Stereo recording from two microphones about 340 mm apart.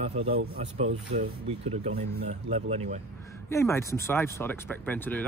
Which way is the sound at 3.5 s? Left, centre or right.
Centre.